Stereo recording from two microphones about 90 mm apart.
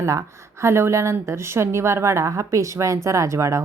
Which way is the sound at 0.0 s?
35° right (ahead or behind).